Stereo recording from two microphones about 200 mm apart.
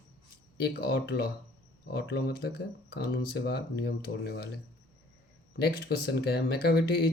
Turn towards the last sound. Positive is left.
turn(degrees=50)  # may be behind; listen again after turning